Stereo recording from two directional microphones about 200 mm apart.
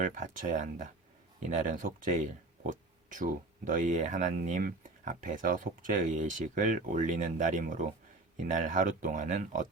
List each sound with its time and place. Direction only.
0.0 s speech: 40° right (ahead or behind)